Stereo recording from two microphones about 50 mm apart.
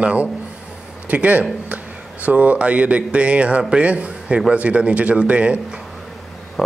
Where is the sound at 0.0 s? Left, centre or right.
Right.